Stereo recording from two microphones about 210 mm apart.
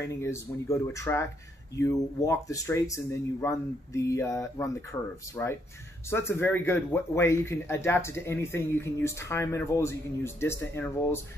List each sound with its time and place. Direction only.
0.0 s speech: 15° left (ahead or behind)